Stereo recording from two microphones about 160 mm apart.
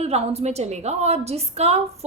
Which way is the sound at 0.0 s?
40° right (ahead or behind).